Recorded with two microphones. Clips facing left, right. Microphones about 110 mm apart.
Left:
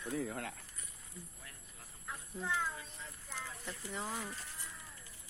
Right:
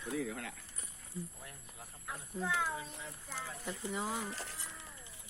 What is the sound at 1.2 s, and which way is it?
Speech, 30° right (ahead or behind).